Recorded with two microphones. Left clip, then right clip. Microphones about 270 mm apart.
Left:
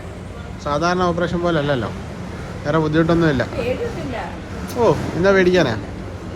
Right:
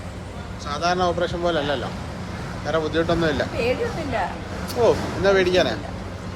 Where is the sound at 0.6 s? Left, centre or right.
Centre.